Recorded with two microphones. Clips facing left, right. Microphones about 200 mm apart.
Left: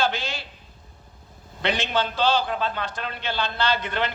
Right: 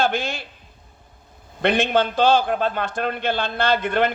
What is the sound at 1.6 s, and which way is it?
A man's voice, 55° right (ahead or behind).